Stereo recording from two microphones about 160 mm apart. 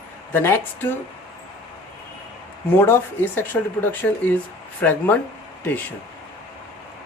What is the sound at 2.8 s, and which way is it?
Speech, 15° left (ahead or behind).